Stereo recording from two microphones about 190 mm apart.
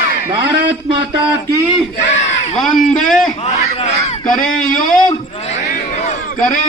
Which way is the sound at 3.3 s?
35° left (ahead or behind).